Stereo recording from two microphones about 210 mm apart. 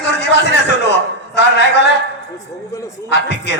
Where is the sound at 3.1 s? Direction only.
55° left (ahead or behind).